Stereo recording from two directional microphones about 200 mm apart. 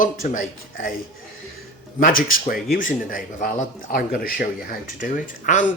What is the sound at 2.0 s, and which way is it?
A man's voice, 45° left (ahead or behind).